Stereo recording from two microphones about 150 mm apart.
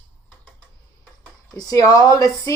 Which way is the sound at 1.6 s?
25° left (ahead or behind).